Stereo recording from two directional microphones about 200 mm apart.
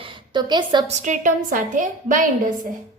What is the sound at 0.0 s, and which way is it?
Speech, 25° right (ahead or behind).